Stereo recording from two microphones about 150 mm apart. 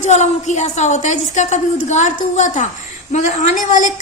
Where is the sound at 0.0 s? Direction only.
50° left (ahead or behind).